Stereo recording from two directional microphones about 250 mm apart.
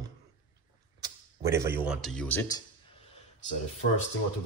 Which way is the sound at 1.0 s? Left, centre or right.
Centre.